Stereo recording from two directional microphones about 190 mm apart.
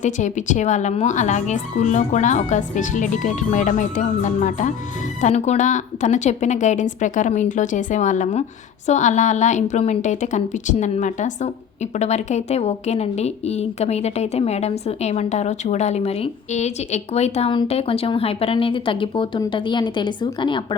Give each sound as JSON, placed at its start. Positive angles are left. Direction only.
{"t": 0.0, "sound": "a woman's voice", "side_deg": 40}